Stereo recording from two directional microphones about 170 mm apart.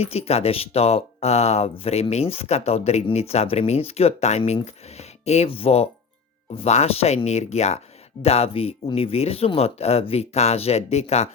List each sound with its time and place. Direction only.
0.0 s speech: 35° left (ahead or behind)